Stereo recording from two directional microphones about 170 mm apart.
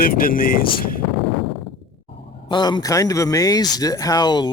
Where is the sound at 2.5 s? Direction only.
25° left (ahead or behind).